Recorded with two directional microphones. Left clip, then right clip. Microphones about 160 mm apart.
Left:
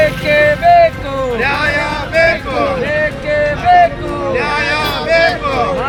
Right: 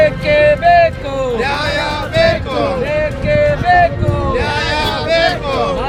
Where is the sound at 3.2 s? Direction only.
30° right (ahead or behind).